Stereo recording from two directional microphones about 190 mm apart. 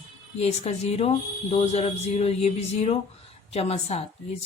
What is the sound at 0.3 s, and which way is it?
A woman's voice, 30° left (ahead or behind).